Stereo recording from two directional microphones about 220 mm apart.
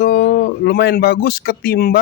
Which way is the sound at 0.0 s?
45° left (ahead or behind).